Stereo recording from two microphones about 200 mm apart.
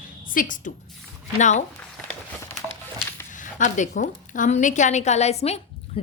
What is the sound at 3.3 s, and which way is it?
A woman's voice, 40° left (ahead or behind).